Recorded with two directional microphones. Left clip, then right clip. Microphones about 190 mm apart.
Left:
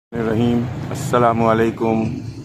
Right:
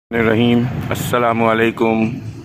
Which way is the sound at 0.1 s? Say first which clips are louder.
Right 5 dB; 15° right (ahead or behind).